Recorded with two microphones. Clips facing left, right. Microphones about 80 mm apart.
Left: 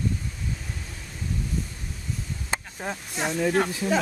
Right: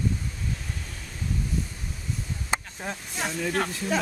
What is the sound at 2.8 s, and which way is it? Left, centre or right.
Speech, centre.